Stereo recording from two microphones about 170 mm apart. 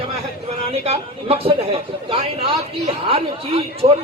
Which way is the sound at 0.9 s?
35° right (ahead or behind).